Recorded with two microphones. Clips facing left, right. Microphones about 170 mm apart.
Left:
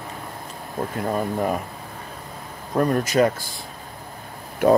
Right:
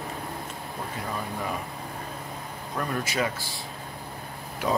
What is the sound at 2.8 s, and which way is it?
Speech, 45° left (ahead or behind).